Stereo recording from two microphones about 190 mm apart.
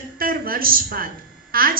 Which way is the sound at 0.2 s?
50° right (ahead or behind).